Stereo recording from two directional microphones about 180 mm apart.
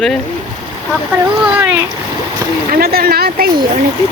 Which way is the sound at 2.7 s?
55° right (ahead or behind).